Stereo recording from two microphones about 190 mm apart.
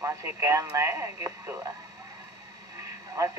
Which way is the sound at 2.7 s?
15° right (ahead or behind).